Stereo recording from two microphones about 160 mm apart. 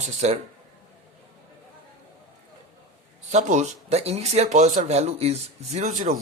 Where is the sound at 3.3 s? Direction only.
45° right (ahead or behind).